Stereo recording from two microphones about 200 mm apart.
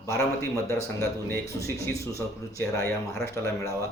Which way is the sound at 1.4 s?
15° left (ahead or behind).